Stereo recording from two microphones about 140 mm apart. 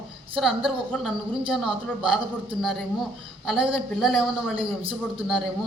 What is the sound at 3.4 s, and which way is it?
A man's voice, 5° right (ahead or behind).